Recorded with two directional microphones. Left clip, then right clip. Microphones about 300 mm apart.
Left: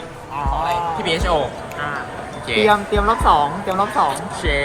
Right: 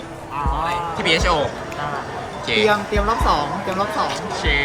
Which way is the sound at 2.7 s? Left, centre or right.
Left.